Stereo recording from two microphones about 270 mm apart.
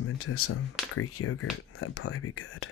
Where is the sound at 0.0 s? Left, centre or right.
Left.